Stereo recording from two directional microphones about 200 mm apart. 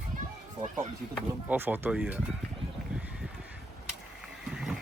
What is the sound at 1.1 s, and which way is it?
Speech, 10° right (ahead or behind).